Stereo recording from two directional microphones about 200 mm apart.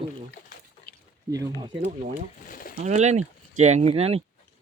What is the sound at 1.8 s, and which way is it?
Speech, 35° right (ahead or behind).